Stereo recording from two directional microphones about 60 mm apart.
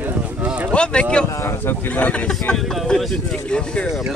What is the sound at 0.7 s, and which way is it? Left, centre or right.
Speech, centre.